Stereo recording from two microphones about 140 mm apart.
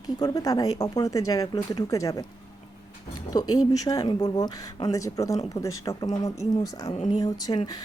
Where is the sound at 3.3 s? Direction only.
25° left (ahead or behind).